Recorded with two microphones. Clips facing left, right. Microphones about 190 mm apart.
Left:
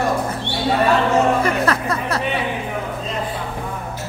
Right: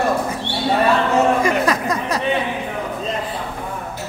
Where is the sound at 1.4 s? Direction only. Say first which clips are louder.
Right 1 dB; 15° right (ahead or behind).